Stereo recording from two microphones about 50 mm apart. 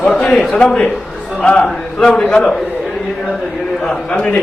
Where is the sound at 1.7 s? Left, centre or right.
Centre.